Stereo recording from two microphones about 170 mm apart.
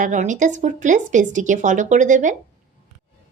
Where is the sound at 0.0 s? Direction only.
45° right (ahead or behind).